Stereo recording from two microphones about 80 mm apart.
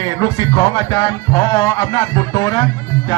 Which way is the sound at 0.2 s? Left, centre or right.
Left.